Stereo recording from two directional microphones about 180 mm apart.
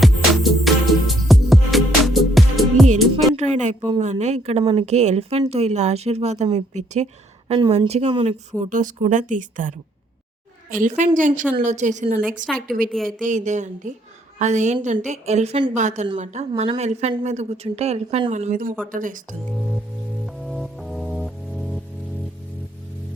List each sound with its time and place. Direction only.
0.0 s music: centre (ahead or behind)
3.3 s a sound: 40° right (ahead or behind)
4.0 s speech: 40° right (ahead or behind)
12.5 s a woman's voice: centre (ahead or behind)
13.1 s speech: 45° right (ahead or behind)
20.2 s music: centre (ahead or behind)